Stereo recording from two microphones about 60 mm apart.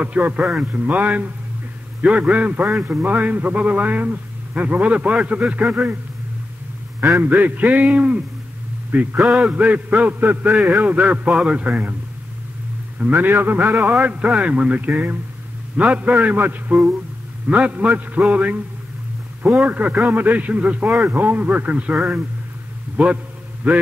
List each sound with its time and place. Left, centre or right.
0.0 s a man's voice: right
7.2 s a man's voice: right
9.2 s a man's voice: centre
9.5 s a man's voice: right
13.1 s a man's voice: right
19.6 s a man's voice: right
23.0 s a man's voice: centre